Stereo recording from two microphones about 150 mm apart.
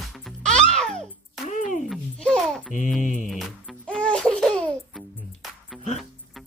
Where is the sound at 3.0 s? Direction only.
60° left (ahead or behind).